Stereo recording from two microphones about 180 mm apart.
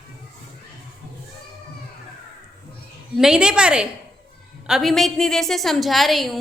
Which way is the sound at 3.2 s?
5° right (ahead or behind).